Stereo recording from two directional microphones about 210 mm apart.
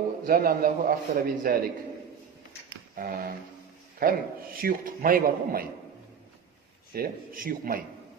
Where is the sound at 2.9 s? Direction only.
45° right (ahead or behind).